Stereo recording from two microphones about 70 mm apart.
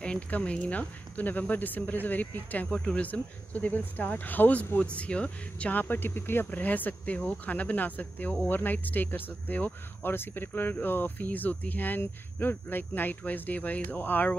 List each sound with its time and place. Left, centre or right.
0.0 s speech: centre